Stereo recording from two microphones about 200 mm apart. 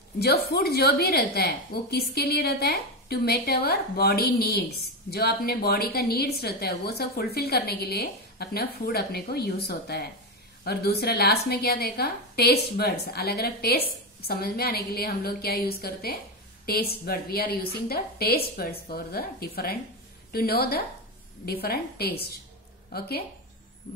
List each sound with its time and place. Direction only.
0.2 s a woman's voice: 50° left (ahead or behind)